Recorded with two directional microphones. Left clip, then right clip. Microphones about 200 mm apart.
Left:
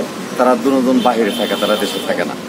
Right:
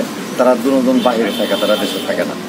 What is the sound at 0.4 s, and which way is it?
Speech, 30° left (ahead or behind).